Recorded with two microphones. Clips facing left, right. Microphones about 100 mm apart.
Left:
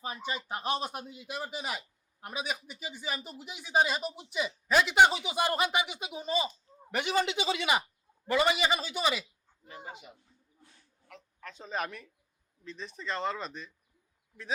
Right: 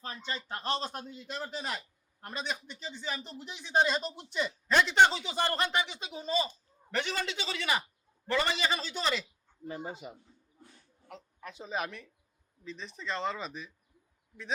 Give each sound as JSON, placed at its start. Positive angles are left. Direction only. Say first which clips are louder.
{"t": 0.0, "sound": "a man's voice", "louder": "left 3 dB", "side_deg": 10}
{"t": 9.6, "sound": "speech", "louder": "right 6 dB", "side_deg": -35}
{"t": 11.1, "sound": "speech", "louder": "right 2 dB", "side_deg": -15}